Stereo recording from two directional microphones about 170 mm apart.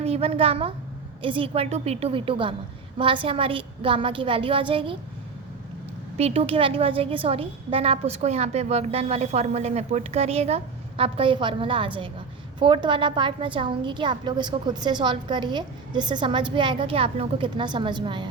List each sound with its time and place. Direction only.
0.0 s a child's voice: 35° right (ahead or behind)
6.1 s a woman's voice: 35° right (ahead or behind)